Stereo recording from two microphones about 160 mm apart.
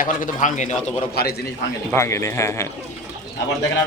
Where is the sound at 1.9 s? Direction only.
15° left (ahead or behind).